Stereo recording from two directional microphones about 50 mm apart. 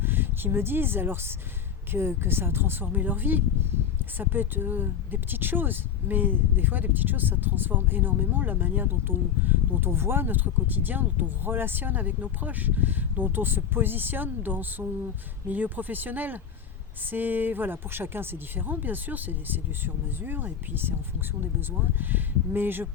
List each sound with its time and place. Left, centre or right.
0.0 s speech: right